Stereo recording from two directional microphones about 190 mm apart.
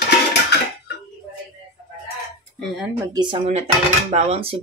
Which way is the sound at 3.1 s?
25° right (ahead or behind).